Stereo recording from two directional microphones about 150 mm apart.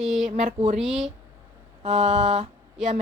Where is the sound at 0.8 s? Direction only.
Centre (ahead or behind).